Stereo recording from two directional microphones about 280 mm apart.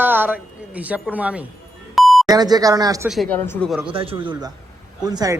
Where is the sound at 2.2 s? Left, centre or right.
Centre.